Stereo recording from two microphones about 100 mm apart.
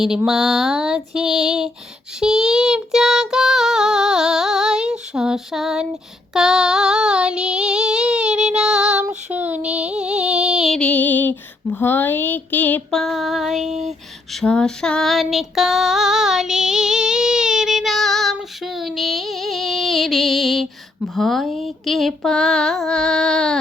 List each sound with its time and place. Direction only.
0.3 s female singing: 5° right (ahead or behind)
2.2 s child singing: 5° right (ahead or behind)
6.3 s female singing: 5° right (ahead or behind)
10.8 s female singing: 15° left (ahead or behind)
12.9 s female singing: 5° left (ahead or behind)